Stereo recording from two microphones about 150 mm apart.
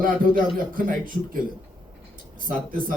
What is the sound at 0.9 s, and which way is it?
Speech, 70° right (ahead or behind).